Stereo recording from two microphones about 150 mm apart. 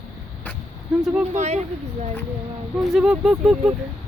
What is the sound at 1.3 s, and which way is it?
Speech, 50° right (ahead or behind).